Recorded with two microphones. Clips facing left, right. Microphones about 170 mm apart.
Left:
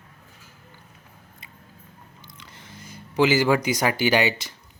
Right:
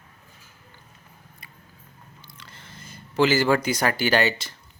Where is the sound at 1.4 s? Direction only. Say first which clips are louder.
Left 2 dB; 20° left (ahead or behind).